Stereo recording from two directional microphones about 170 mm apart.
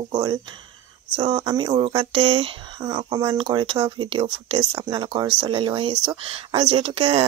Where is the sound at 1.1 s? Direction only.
30° right (ahead or behind).